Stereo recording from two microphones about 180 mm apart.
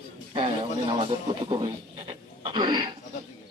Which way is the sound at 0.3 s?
30° right (ahead or behind).